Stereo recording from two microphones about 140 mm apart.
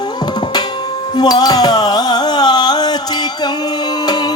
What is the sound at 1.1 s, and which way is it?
Music, 30° left (ahead or behind).